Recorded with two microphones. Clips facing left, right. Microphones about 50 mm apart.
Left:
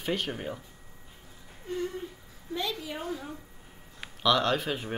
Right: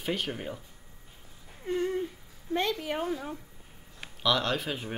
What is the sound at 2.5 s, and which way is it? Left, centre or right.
Speech, right.